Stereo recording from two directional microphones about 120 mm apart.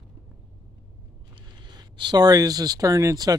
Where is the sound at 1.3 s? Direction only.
40° right (ahead or behind).